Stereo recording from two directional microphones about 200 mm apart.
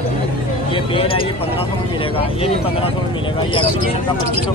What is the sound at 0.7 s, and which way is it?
Speech, 25° left (ahead or behind).